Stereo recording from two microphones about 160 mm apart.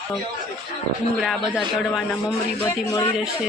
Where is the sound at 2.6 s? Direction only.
20° left (ahead or behind).